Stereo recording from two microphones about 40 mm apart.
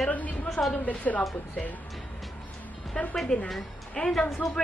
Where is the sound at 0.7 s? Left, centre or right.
Left.